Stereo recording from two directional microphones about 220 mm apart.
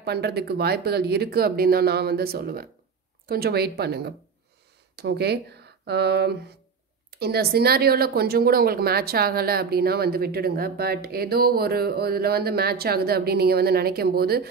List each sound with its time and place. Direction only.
0.0 s speech: 45° right (ahead or behind)